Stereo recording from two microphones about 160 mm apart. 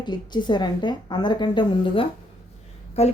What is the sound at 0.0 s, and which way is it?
A woman's voice, 30° left (ahead or behind).